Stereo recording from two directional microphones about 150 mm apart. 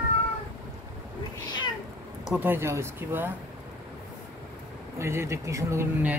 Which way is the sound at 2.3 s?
15° right (ahead or behind).